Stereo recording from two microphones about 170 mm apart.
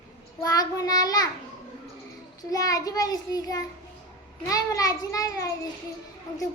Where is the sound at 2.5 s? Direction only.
20° left (ahead or behind).